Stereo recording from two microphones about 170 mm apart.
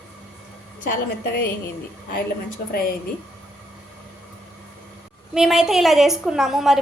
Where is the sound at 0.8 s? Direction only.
70° left (ahead or behind).